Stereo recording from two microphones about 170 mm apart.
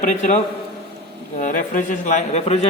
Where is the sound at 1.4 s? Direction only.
50° left (ahead or behind).